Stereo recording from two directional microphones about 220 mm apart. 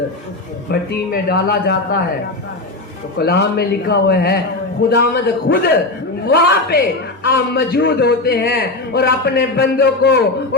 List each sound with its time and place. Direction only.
0.7 s a man's voice: 45° left (ahead or behind)
3.2 s a man's voice: 45° left (ahead or behind)